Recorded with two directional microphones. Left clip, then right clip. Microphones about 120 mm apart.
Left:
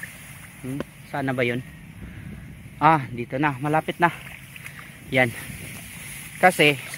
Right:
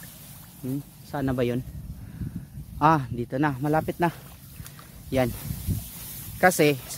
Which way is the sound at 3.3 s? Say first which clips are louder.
Left 2 dB; 80° right.